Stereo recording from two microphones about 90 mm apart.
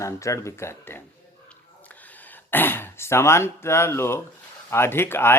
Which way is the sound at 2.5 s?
25° left (ahead or behind).